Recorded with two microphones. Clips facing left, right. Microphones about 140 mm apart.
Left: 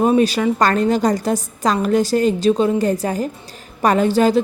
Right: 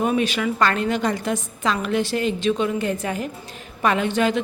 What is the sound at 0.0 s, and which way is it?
A woman's voice, 35° left (ahead or behind).